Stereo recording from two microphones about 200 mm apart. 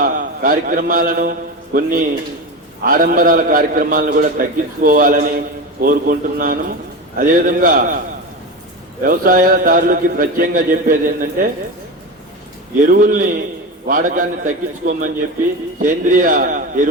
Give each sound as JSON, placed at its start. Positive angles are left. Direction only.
{"t": 0.0, "sound": "a man's voice", "side_deg": -45}
{"t": 9.0, "sound": "a man's voice", "side_deg": -45}
{"t": 12.8, "sound": "a man's voice", "side_deg": -45}